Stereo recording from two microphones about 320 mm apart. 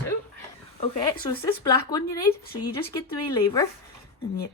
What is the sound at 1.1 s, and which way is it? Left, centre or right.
Speech, centre.